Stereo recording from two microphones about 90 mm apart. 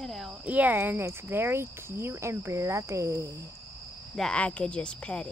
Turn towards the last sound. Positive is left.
turn(degrees=10)  # may be behind; listen again after turning